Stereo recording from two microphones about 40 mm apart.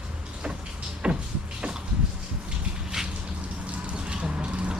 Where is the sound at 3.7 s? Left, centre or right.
Right.